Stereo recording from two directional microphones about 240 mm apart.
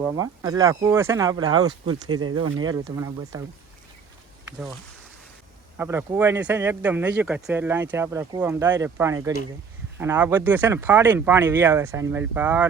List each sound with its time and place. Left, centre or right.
0.0 s speech: centre
2.0 s speech: right
2.9 s speech: centre
5.7 s speech: centre